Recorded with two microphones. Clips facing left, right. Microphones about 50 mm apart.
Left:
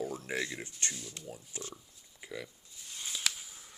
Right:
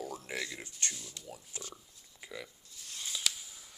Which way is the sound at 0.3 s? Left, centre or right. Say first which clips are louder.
Left 2 dB; left.